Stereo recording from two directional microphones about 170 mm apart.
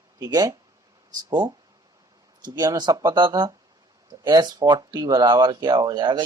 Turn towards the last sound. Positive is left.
turn(degrees=-25)  # may be behind; listen again after turning